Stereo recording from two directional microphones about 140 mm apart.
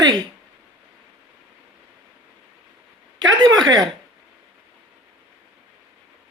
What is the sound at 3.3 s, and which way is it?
Speech, 30° right (ahead or behind).